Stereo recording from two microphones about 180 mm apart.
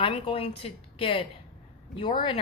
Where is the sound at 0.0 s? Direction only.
30° left (ahead or behind).